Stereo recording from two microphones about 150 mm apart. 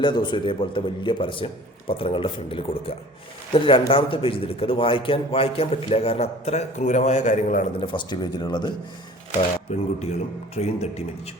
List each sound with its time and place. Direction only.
0.0 s a man's voice: 30° left (ahead or behind); by 7.6 s 55° left (ahead or behind)
7.8 s speech: 35° left (ahead or behind)
9.7 s speech: 50° left (ahead or behind)